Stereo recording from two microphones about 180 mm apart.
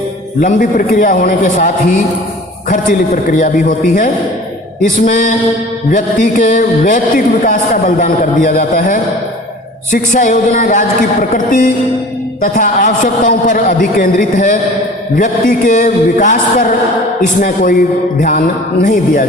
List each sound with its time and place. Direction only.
0.4 s a man's voice: 50° left (ahead or behind)
3.3 s a man's voice: 50° left (ahead or behind)